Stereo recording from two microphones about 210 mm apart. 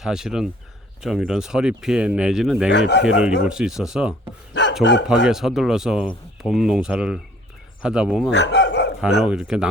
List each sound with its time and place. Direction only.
0.0 s speech: centre (ahead or behind)
2.7 s speech: 55° left (ahead or behind)
3.2 s speech: 5° right (ahead or behind)
4.8 s speech: 55° left (ahead or behind)
5.0 s speech: 5° right (ahead or behind)
8.3 s a sound: 55° left (ahead or behind)
9.0 s speech: centre (ahead or behind)